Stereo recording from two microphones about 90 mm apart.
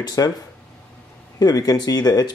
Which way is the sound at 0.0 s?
45° left (ahead or behind).